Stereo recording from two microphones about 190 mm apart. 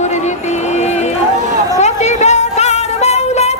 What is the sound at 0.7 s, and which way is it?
Run, 35° left (ahead or behind).